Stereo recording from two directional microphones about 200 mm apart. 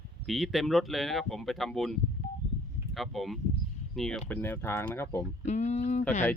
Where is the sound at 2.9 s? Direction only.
Centre (ahead or behind).